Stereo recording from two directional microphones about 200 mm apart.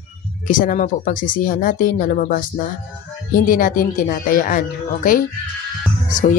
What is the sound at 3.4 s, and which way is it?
Speech, 45° left (ahead or behind).